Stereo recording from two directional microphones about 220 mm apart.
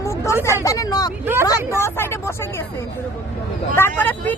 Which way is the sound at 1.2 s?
10° right (ahead or behind).